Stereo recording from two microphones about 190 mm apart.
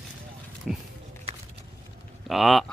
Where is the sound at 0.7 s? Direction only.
Centre (ahead or behind).